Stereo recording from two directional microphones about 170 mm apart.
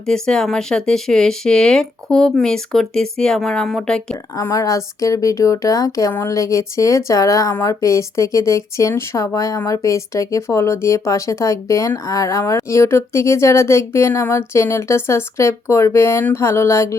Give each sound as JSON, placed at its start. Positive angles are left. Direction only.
{"t": 0.0, "sound": "speech", "side_deg": 5}
{"t": 4.4, "sound": "speech", "side_deg": 20}